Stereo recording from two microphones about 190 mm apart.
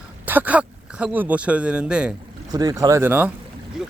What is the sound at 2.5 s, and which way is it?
Speech, 20° right (ahead or behind).